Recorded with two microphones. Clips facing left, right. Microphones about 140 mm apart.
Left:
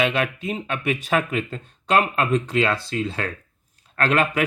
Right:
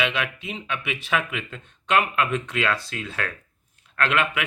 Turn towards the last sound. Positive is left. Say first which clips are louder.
# left 3 dB
turn(degrees=40)  # may be behind; listen again after turning